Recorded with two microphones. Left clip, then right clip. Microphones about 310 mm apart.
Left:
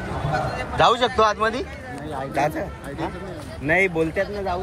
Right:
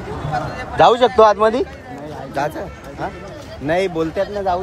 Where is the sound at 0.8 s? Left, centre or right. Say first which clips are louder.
Right 7 dB; centre.